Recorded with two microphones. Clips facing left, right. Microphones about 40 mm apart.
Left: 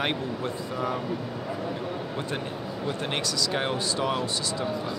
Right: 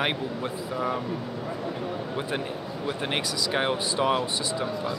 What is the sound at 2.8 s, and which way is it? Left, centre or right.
Speech, centre.